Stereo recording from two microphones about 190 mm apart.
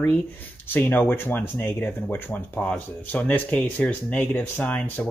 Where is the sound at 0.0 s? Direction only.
10° left (ahead or behind).